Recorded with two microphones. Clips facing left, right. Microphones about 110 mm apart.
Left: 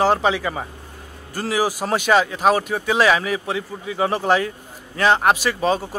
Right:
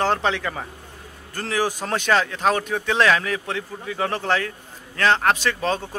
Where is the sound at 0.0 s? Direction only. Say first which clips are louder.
Left 4 dB; 5° left (ahead or behind).